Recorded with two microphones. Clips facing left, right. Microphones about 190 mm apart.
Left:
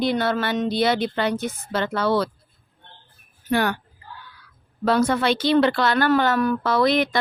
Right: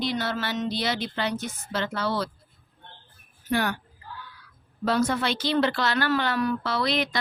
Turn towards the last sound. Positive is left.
turn(degrees=50)  # may be behind; listen again after turning